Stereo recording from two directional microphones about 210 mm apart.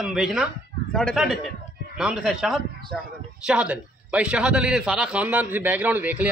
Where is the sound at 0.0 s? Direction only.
Centre (ahead or behind).